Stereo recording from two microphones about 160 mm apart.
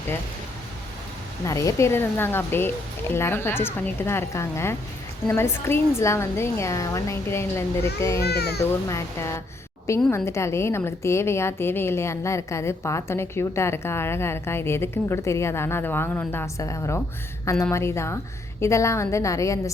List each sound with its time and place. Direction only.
1.5 s a woman's voice: 20° left (ahead or behind)
8.2 s a child's voice: 90° left
8.9 s a woman's voice: 20° left (ahead or behind)